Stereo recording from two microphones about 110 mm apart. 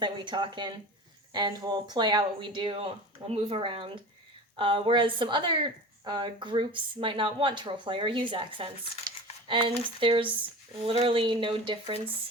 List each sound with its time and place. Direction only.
0.0 s speech: 45° right (ahead or behind)